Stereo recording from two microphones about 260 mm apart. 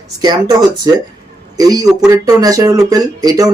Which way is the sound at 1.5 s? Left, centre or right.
Centre.